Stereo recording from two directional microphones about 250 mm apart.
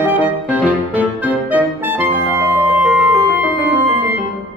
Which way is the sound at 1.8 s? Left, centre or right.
Centre.